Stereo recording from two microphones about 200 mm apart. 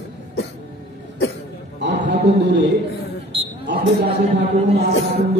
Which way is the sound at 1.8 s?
60° right (ahead or behind).